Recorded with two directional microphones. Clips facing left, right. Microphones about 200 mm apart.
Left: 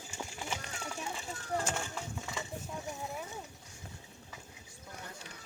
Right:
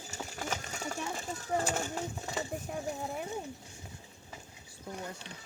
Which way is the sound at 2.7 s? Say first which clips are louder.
Right 4 dB; 60° right (ahead or behind).